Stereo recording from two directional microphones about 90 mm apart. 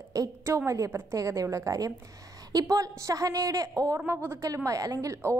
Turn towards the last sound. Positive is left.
turn(degrees=-35)  # may be behind; listen again after turning